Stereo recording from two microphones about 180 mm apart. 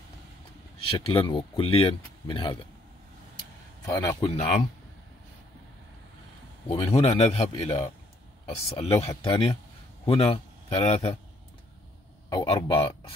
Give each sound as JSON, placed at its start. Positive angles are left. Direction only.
{"t": 0.7, "sound": "speech", "side_deg": 30}
{"t": 3.8, "sound": "speech", "side_deg": 20}
{"t": 6.7, "sound": "a man's voice", "side_deg": 35}
{"t": 12.3, "sound": "speech", "side_deg": 25}